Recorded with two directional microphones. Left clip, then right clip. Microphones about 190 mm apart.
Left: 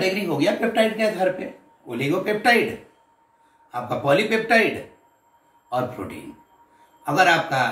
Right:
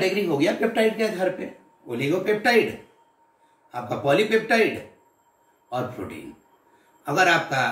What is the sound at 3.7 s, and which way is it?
Speech, 5° left (ahead or behind).